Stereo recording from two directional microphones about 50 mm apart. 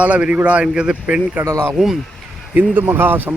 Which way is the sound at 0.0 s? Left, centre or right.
Right.